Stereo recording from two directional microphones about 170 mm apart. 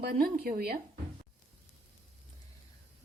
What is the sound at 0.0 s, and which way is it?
Speech, 60° right (ahead or behind).